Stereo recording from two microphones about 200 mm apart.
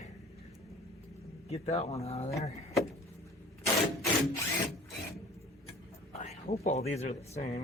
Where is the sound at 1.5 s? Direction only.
30° left (ahead or behind).